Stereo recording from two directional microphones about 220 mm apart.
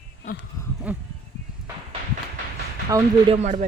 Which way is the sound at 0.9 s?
5° right (ahead or behind).